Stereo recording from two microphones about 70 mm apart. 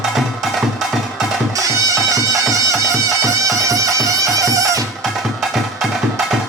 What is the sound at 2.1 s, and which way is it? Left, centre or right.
Music, right.